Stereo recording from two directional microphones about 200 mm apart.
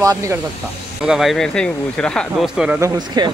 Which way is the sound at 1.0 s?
Centre (ahead or behind).